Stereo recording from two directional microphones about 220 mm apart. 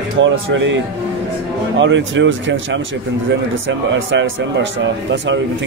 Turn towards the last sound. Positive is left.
turn(degrees=-55)  # may be behind; listen again after turning